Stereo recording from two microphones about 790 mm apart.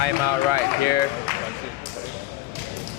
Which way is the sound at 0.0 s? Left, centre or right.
Right.